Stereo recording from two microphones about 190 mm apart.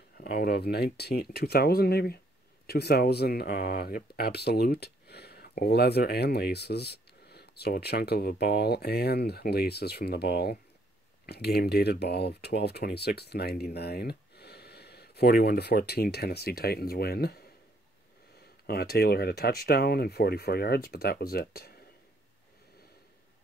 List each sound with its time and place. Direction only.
0.2 s speech: 50° left (ahead or behind)
18.7 s speech: 55° left (ahead or behind)